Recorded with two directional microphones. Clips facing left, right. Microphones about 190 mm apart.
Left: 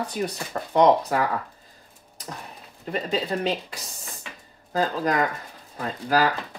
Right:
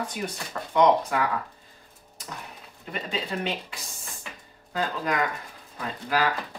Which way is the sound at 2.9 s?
35° left (ahead or behind).